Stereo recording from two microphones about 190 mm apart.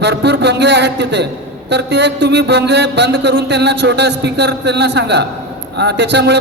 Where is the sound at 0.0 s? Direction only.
65° right (ahead or behind).